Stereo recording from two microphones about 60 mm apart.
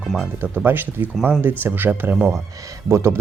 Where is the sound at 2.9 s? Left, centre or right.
Right.